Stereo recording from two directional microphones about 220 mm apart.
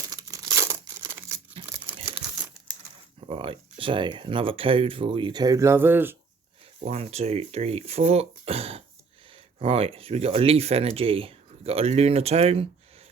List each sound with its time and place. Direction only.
0.1 s crumpling: 15° right (ahead or behind)
3.2 s speech: 25° right (ahead or behind)
6.8 s speech: 30° right (ahead or behind)